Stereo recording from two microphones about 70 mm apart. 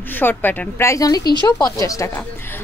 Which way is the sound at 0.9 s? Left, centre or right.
Left.